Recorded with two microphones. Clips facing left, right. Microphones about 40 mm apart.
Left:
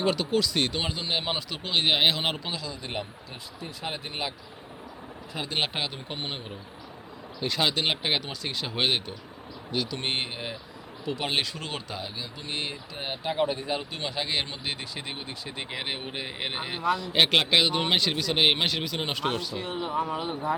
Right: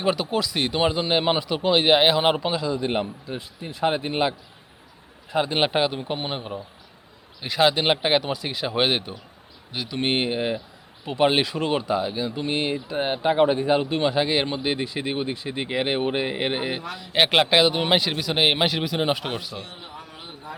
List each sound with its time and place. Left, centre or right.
0.0 s a man's voice: centre
19.6 s speech: left